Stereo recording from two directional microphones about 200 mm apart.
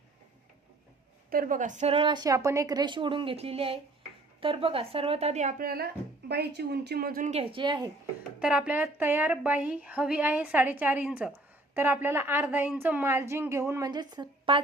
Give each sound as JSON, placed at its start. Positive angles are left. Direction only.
{"t": 1.3, "sound": "a woman's voice", "side_deg": -45}
{"t": 8.4, "sound": "a woman's voice", "side_deg": -5}